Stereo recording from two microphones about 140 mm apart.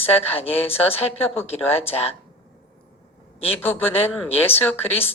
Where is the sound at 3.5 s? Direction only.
15° left (ahead or behind).